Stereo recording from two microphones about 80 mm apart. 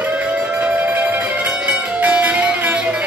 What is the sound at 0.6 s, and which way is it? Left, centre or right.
Music, centre.